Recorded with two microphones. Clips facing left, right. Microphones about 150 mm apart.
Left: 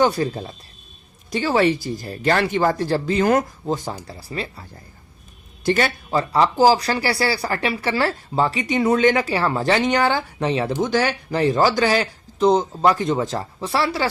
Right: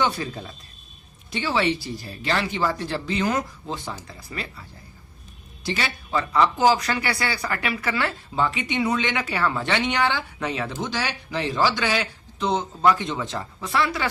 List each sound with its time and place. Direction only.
0.0 s speech: 40° left (ahead or behind)
5.6 s speech: 50° left (ahead or behind)
6.1 s speech: 35° left (ahead or behind)
10.8 s speech: 50° left (ahead or behind); by 14.1 s 35° left (ahead or behind)